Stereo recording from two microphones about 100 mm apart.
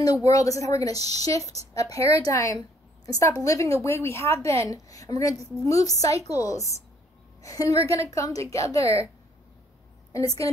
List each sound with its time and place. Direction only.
0.0 s a woman's voice: 35° left (ahead or behind)
5.3 s a woman's voice: 30° right (ahead or behind)
5.7 s a woman's voice: 35° left (ahead or behind)
10.1 s a woman's voice: 35° left (ahead or behind)